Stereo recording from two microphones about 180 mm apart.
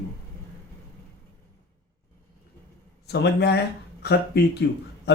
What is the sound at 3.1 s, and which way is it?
Speech, 70° left (ahead or behind).